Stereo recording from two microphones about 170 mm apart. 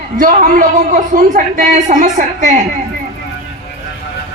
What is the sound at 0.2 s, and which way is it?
A woman's voice, 55° right (ahead or behind).